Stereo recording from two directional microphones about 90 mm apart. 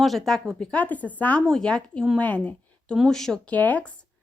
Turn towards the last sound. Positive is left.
turn(degrees=15)  # may be behind; listen again after turning